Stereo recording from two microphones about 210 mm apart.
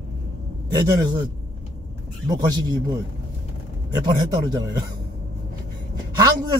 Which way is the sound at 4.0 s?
20° right (ahead or behind).